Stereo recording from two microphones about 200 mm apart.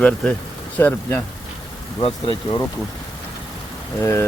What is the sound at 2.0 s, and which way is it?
Speech, 25° left (ahead or behind).